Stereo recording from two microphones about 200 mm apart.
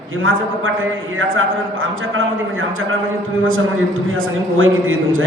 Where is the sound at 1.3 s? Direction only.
80° right.